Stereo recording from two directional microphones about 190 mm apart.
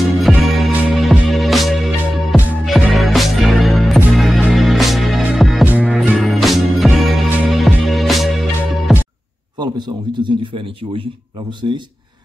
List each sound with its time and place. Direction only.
0.2 s music: centre (ahead or behind)
9.6 s a man's voice: 25° right (ahead or behind)